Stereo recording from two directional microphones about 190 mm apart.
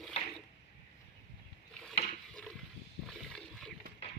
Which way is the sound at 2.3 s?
5° left (ahead or behind).